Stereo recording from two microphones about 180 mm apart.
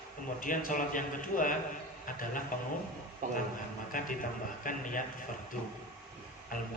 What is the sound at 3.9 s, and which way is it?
A man's voice, 50° left (ahead or behind).